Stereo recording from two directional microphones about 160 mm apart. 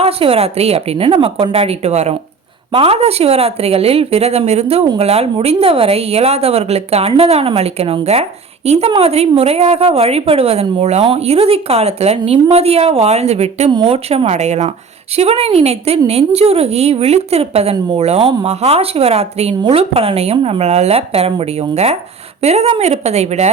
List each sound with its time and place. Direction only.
0.0 s a woman's voice: 35° right (ahead or behind)
13.7 s a woman's voice: 35° right (ahead or behind)